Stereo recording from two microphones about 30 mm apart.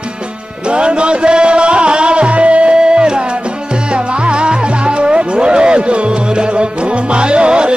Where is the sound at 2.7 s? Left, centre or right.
Right.